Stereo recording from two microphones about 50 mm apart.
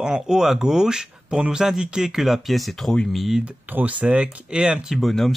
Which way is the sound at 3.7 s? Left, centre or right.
Right.